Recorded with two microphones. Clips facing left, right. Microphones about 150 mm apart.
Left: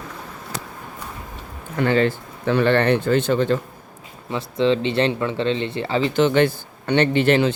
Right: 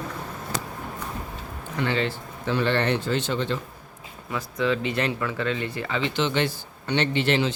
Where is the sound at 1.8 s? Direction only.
50° left (ahead or behind).